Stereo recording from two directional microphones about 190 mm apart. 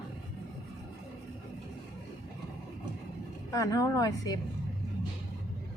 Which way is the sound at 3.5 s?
15° left (ahead or behind).